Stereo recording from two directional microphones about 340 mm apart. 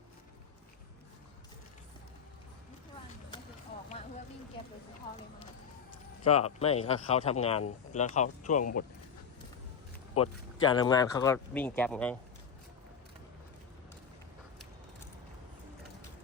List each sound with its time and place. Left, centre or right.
6.2 s speech: centre
10.2 s speech: centre